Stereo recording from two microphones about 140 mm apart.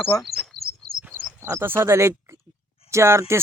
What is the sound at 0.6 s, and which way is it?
Chirp, 90° right.